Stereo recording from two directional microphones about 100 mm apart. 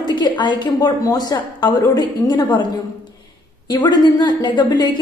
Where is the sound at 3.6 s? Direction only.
45° left (ahead or behind).